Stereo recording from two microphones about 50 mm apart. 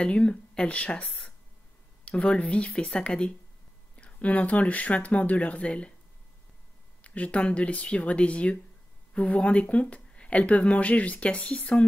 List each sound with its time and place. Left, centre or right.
0.0 s speech: left
1.0 s speech: centre
2.0 s speech: left
7.0 s speech: left